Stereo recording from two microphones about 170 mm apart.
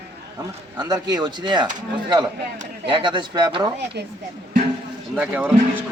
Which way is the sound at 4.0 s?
75° right (ahead or behind).